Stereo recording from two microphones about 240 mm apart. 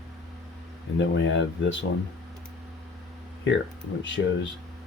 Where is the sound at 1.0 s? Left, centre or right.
Left.